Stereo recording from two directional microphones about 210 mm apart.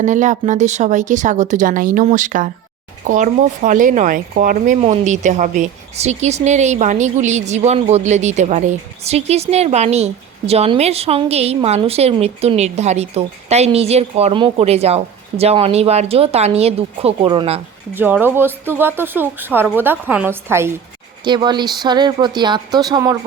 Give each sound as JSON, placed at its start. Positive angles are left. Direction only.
{"t": 0.0, "sound": "speech", "side_deg": -35}
{"t": 17.9, "sound": "a woman's voice", "side_deg": -10}